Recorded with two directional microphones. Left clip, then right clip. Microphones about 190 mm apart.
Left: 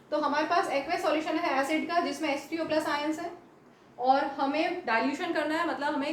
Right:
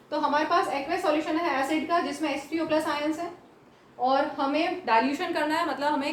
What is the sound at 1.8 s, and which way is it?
A woman's voice, centre (ahead or behind).